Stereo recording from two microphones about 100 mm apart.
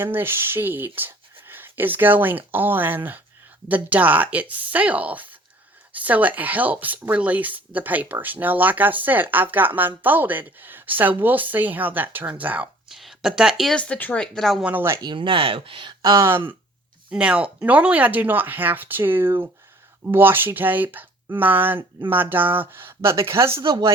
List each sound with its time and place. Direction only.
0.0 s speech: 20° right (ahead or behind)
12.9 s speech: centre (ahead or behind)
13.7 s speech: 10° left (ahead or behind)
14.6 s speech: 20° right (ahead or behind)
15.0 s speech: 55° right (ahead or behind)
16.1 s speech: 25° right (ahead or behind)
17.1 s speech: 10° right (ahead or behind); by 23.6 s 30° right (ahead or behind)
23.6 s speech: 50° right (ahead or behind)